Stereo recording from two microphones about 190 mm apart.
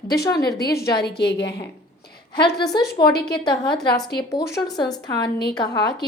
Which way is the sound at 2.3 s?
25° left (ahead or behind).